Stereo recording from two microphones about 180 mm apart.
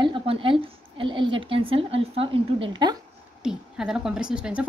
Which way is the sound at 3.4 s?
5° right (ahead or behind).